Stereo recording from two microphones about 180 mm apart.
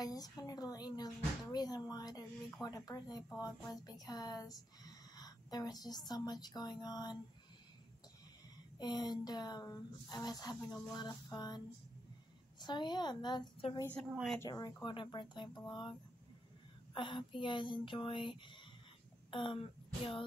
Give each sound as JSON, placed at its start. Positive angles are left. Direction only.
{"t": 0.0, "sound": "speech", "side_deg": 20}
{"t": 8.7, "sound": "a woman's voice", "side_deg": 25}
{"t": 13.7, "sound": "a woman's voice", "side_deg": 10}
{"t": 14.4, "sound": "speech", "side_deg": 20}